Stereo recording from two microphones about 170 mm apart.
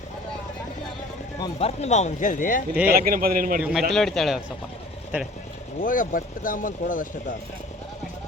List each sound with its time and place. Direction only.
1.5 s speech: 40° left (ahead or behind)
2.8 s a man's voice: 60° right (ahead or behind)
3.6 s speech: 5° right (ahead or behind)
5.8 s speech: 55° left (ahead or behind)